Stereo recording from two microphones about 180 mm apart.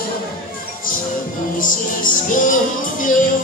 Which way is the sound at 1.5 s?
50° left (ahead or behind).